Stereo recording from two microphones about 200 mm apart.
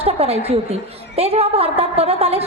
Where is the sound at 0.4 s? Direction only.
30° right (ahead or behind).